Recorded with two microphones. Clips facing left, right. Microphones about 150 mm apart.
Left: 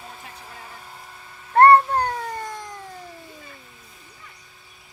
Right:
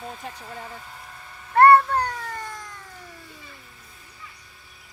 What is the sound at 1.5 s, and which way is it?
Cat, 30° left (ahead or behind).